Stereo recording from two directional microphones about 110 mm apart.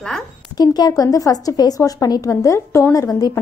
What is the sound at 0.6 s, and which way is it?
Speech, 35° left (ahead or behind).